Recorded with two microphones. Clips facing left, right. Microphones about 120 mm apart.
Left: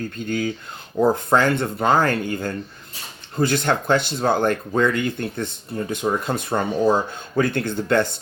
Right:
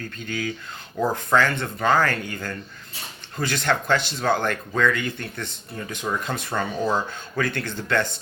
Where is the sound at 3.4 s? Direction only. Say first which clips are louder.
Left 7 dB; 55° left (ahead or behind).